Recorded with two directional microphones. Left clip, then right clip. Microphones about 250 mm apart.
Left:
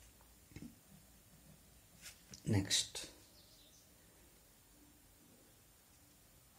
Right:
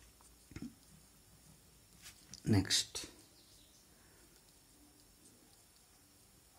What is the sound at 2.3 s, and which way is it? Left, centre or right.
Speech, right.